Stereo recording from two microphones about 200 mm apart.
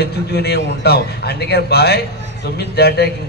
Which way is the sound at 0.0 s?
55° left (ahead or behind).